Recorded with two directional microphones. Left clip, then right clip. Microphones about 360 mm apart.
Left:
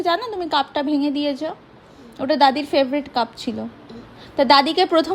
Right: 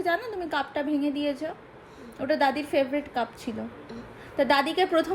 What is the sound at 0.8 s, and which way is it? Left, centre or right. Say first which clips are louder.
Speech: left 6 dB; left.